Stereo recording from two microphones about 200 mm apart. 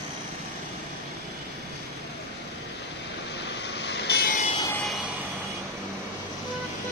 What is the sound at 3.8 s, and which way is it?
Vehicle, 55° left (ahead or behind).